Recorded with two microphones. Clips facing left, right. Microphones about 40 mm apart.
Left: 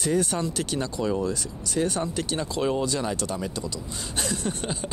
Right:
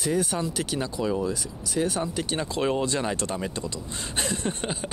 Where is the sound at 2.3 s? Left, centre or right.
Right.